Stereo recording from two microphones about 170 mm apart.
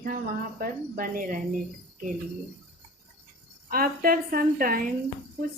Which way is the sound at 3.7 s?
60° right (ahead or behind).